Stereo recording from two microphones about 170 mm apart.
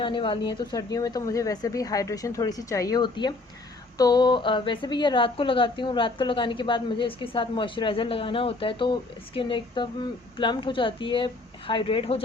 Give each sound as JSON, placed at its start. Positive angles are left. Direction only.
{"t": 0.0, "sound": "a woman's voice", "side_deg": 30}